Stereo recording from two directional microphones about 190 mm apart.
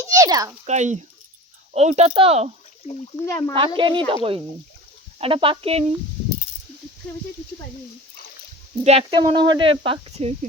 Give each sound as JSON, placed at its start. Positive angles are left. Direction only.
{"t": 0.0, "sound": "a sound", "side_deg": -15}
{"t": 0.6, "sound": "speech", "side_deg": -40}
{"t": 3.2, "sound": "speech", "side_deg": 15}
{"t": 3.8, "sound": "speech", "side_deg": -25}
{"t": 8.8, "sound": "speech", "side_deg": -35}